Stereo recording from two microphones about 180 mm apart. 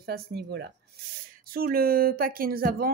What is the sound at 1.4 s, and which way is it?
Speech, 55° right (ahead or behind).